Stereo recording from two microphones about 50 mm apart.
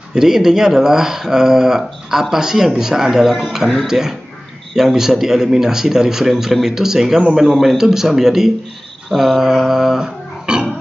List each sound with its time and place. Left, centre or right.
0.1 s speech: centre
7.4 s a man's voice: centre
7.7 s speech: centre
9.1 s a sound: centre